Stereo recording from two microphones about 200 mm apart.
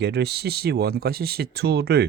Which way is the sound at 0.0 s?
55° right (ahead or behind).